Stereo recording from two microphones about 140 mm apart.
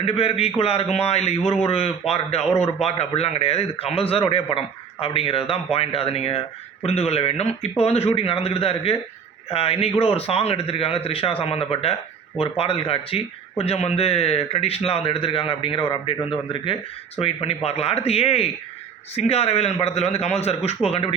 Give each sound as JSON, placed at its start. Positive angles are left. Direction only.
{"t": 0.0, "sound": "a man's voice", "side_deg": 45}